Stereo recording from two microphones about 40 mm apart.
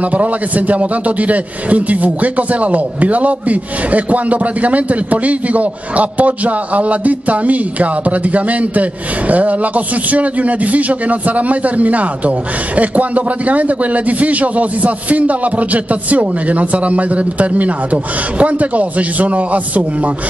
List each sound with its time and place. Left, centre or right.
0.0 s a man's voice: right